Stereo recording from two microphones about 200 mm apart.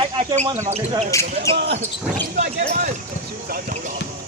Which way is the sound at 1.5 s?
60° right (ahead or behind).